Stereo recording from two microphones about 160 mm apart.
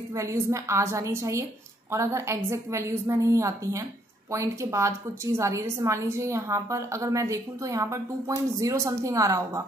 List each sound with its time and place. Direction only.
0.1 s a woman's voice: 20° right (ahead or behind)